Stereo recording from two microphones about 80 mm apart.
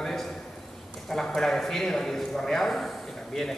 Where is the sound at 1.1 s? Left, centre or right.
Centre.